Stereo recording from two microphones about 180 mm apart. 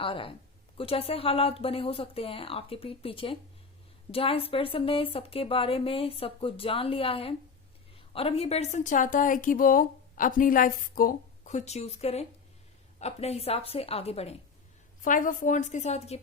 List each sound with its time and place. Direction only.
0.0 s a woman's voice: 30° left (ahead or behind)
15.0 s a woman's voice: 50° left (ahead or behind)